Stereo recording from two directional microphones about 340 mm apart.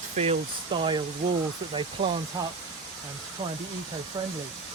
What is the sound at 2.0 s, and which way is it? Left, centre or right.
Speech, centre.